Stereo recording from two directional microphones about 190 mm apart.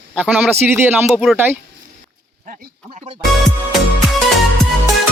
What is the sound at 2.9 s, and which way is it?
Speech, 30° right (ahead or behind).